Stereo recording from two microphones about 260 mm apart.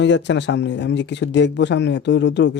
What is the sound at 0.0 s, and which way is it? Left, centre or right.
Speech, left.